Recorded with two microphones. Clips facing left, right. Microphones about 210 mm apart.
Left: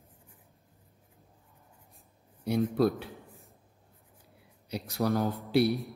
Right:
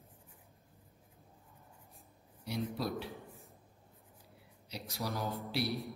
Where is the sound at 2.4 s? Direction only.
55° left (ahead or behind).